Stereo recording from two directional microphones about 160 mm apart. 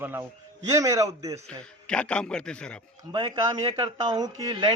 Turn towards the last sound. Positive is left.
turn(degrees=-25)  # may be behind; listen again after turning